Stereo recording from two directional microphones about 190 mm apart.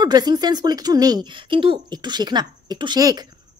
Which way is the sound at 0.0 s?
20° right (ahead or behind).